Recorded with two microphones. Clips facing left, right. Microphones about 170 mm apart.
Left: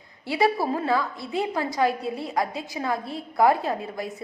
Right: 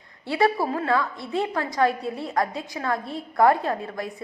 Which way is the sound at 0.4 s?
5° left (ahead or behind).